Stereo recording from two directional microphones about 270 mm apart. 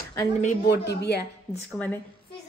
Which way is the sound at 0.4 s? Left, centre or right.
Left.